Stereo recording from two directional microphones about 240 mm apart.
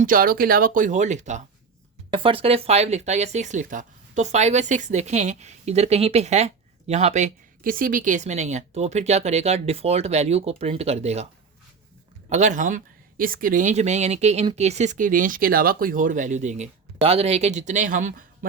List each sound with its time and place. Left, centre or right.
0.0 s speech: right
12.3 s speech: right